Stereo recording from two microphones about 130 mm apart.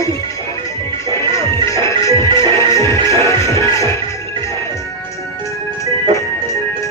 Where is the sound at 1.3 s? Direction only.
25° left (ahead or behind).